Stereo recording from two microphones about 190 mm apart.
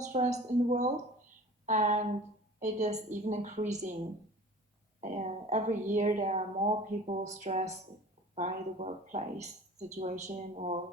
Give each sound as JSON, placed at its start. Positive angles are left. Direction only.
{"t": 0.0, "sound": "a sound", "side_deg": -35}
{"t": 1.6, "sound": "a woman's voice", "side_deg": -40}
{"t": 4.9, "sound": "a woman's voice", "side_deg": -35}